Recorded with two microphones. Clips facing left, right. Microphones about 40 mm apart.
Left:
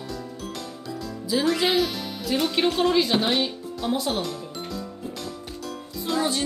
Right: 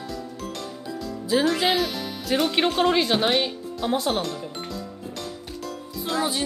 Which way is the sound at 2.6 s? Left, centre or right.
Right.